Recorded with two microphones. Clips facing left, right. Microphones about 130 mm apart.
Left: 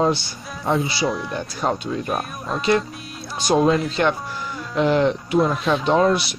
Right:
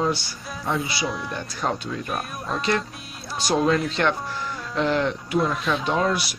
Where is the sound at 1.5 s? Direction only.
20° left (ahead or behind).